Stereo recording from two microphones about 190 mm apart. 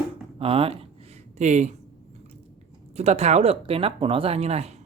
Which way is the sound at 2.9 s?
35° right (ahead or behind).